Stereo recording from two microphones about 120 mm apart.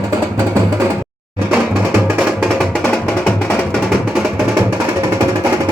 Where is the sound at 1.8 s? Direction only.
15° right (ahead or behind).